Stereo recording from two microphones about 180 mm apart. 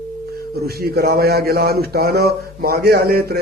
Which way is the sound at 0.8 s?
60° right (ahead or behind).